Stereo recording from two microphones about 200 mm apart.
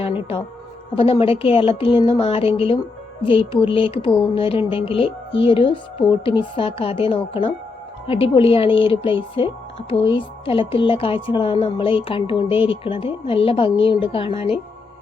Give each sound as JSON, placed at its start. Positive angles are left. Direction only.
{"t": 0.0, "sound": "music", "side_deg": 30}
{"t": 0.9, "sound": "speech", "side_deg": 30}